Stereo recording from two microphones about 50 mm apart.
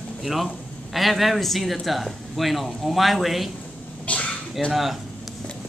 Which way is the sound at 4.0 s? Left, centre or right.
Left.